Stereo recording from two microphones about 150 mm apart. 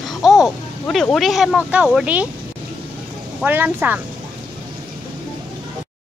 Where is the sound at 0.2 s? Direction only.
5° right (ahead or behind).